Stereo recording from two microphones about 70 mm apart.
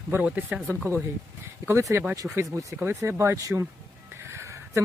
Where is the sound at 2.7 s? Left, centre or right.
Right.